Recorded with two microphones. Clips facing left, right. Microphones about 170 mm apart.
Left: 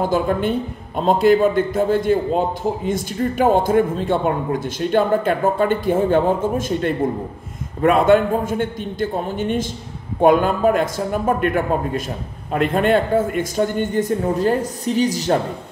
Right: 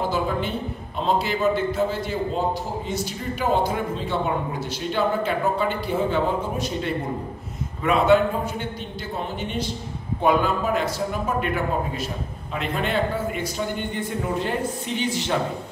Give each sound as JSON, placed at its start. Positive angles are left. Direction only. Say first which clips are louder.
{"t": 0.1, "sound": "speech", "louder": "left 6 dB", "side_deg": 50}